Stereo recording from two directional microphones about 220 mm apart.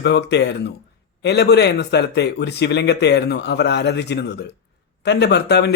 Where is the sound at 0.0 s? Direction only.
50° left (ahead or behind).